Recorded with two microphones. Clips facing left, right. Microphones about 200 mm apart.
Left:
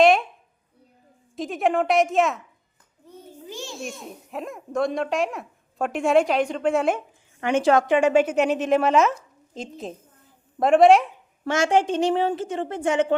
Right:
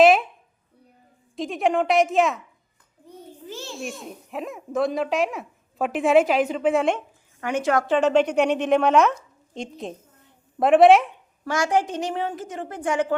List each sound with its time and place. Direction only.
0.0 s a sound: centre (ahead or behind)
1.4 s a child's voice: centre (ahead or behind)
3.5 s a child's voice: 15° left (ahead or behind)
3.8 s a child's voice: centre (ahead or behind)
7.4 s a woman's voice: 25° left (ahead or behind)
7.9 s speech: 10° left (ahead or behind)
11.4 s a woman's voice: 25° left (ahead or behind)